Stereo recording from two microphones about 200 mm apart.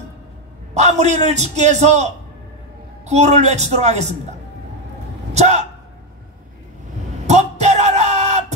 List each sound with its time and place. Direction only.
0.7 s a man's voice: 35° right (ahead or behind)
5.3 s a man's voice: 35° right (ahead or behind)
7.2 s music: 35° right (ahead or behind)